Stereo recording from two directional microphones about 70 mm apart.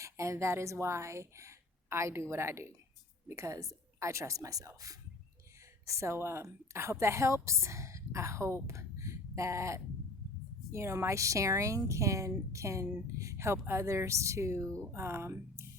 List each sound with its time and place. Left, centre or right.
0.0 s a woman's voice: right